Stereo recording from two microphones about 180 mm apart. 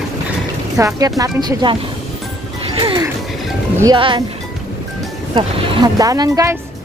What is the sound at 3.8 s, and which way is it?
Speech, 25° right (ahead or behind).